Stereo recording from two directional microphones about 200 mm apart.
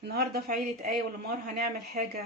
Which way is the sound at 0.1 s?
50° right (ahead or behind).